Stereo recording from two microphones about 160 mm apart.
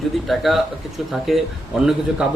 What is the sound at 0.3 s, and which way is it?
Speech, centre (ahead or behind).